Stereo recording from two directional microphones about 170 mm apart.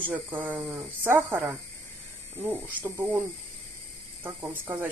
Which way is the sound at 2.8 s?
15° right (ahead or behind).